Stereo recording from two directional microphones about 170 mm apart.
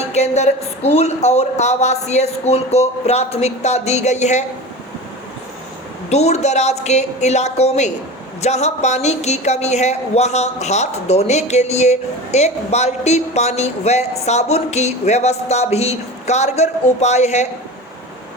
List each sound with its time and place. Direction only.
0.1 s a woman's voice: 40° left (ahead or behind)
6.1 s a woman's voice: 40° left (ahead or behind)